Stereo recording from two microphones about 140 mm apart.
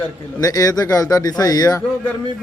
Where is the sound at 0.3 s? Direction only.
25° left (ahead or behind).